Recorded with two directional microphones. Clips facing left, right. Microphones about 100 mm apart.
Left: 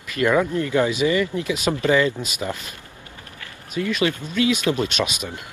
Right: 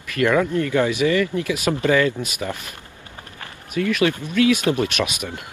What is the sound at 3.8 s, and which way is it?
Speech, 20° left (ahead or behind).